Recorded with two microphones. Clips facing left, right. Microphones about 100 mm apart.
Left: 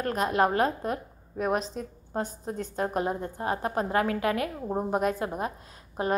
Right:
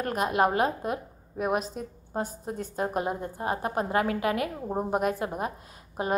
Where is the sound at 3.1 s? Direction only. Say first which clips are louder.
Even; 15° right (ahead or behind).